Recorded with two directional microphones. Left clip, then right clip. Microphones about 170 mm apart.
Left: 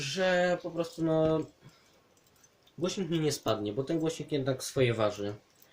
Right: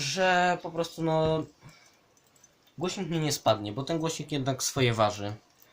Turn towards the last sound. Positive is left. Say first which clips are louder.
# right 2 dB
turn(degrees=-50)  # may be behind; listen again after turning